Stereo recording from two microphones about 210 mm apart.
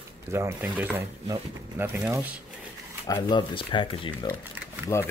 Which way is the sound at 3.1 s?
20° left (ahead or behind).